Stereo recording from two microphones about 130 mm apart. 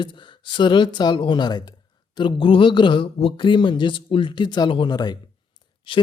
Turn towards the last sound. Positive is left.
turn(degrees=35)  # may be behind; listen again after turning